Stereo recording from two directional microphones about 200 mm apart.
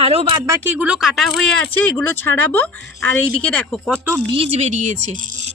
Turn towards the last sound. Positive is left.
turn(degrees=-35)  # may be behind; listen again after turning